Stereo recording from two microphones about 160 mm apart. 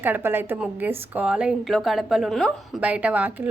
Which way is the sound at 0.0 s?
15° right (ahead or behind).